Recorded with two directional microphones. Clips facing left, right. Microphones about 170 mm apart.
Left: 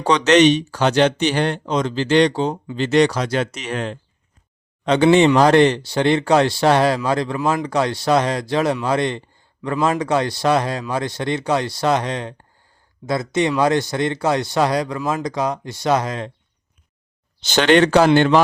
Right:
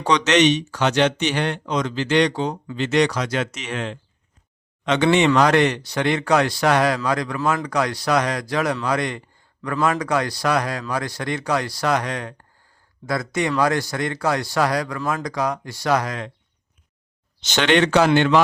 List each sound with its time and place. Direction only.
0.0 s speech: 35° left (ahead or behind)
5.1 s speech: 30° left (ahead or behind)
17.4 s speech: 35° left (ahead or behind)